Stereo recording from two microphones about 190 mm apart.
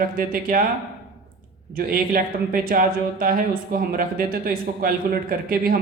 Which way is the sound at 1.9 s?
50° right (ahead or behind).